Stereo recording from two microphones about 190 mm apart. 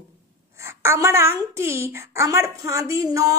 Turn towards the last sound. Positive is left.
turn(degrees=-15)  # may be behind; listen again after turning